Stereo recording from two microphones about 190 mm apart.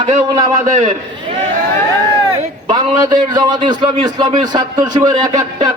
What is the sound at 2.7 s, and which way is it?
A man's voice, 25° right (ahead or behind).